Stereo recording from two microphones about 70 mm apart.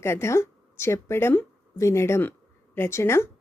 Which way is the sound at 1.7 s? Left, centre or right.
Left.